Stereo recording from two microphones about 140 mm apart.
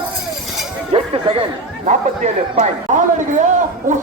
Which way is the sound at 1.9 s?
60° right (ahead or behind).